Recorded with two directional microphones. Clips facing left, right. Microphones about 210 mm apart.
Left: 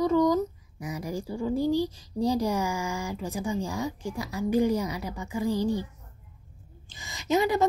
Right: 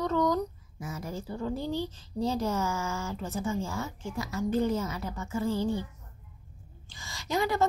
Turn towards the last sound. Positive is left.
turn(degrees=20)  # may be behind; listen again after turning